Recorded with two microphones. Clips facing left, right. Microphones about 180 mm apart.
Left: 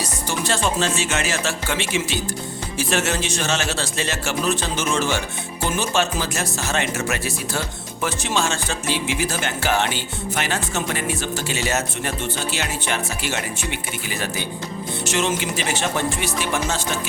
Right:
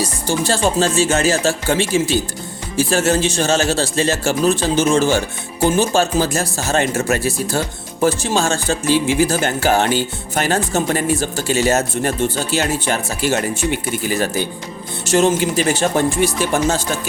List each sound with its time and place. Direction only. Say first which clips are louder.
0.0 s speech: right 6 dB; 30° right (ahead or behind)